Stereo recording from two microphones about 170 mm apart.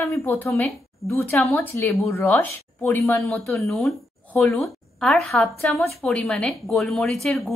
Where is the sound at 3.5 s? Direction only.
Centre (ahead or behind).